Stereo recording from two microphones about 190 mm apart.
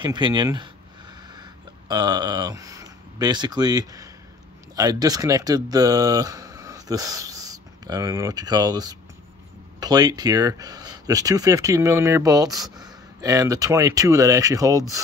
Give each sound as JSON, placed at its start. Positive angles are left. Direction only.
{"t": 0.0, "sound": "speech", "side_deg": -25}
{"t": 1.3, "sound": "a sound", "side_deg": -20}
{"t": 4.7, "sound": "speech", "side_deg": -20}